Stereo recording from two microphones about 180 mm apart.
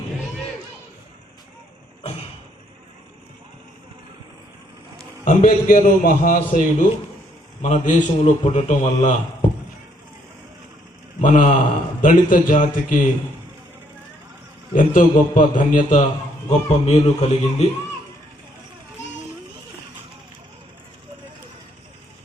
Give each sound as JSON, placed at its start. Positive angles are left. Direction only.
{"t": 5.2, "sound": "a man's voice", "side_deg": 50}
{"t": 11.2, "sound": "a man's voice", "side_deg": 45}
{"t": 14.7, "sound": "a man's voice", "side_deg": 45}